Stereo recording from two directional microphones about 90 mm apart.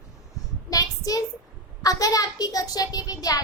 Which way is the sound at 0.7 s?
40° left (ahead or behind).